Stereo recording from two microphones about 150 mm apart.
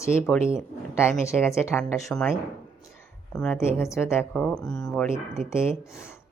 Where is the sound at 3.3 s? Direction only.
5° left (ahead or behind).